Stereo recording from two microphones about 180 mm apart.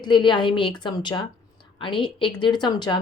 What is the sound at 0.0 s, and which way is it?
A woman's voice, 25° left (ahead or behind).